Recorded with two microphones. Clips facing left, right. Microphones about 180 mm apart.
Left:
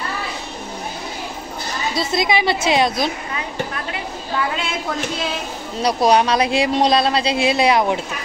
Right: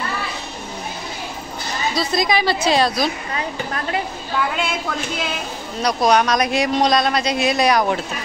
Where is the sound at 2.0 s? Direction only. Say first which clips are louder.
Left 1 dB; 25° left (ahead or behind).